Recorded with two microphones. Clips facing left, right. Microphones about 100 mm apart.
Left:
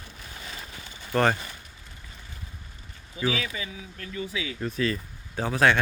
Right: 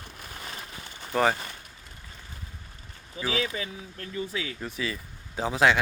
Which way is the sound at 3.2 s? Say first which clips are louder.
Left 1 dB; 35° right (ahead or behind).